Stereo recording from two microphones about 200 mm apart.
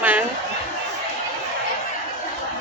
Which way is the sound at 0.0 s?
10° right (ahead or behind).